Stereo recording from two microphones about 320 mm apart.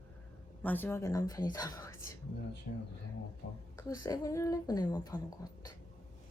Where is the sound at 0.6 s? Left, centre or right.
Centre.